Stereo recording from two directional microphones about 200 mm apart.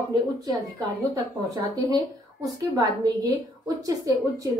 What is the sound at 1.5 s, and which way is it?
A woman's voice, 20° right (ahead or behind).